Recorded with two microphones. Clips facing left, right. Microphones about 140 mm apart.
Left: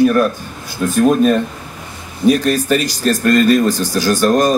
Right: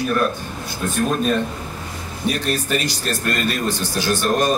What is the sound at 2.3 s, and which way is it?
Speech, 40° left (ahead or behind).